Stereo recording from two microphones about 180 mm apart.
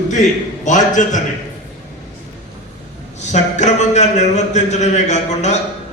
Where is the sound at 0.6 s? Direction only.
45° left (ahead or behind).